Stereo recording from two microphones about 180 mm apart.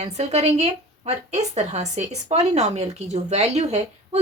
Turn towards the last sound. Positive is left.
turn(degrees=-35)  # may be behind; listen again after turning